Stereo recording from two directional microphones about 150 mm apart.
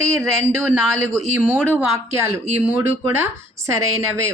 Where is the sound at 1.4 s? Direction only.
15° right (ahead or behind).